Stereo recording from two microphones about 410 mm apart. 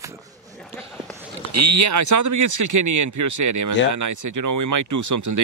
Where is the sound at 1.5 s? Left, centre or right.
Right.